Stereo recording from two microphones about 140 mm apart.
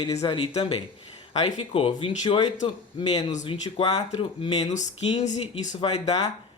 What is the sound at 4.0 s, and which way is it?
Speech, 50° left (ahead or behind).